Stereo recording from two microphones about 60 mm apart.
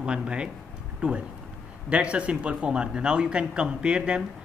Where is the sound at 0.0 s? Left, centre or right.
Centre.